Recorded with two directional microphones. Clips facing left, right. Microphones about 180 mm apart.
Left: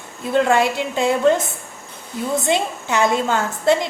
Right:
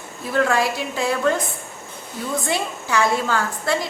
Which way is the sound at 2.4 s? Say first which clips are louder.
Left 4 dB; 20° left (ahead or behind).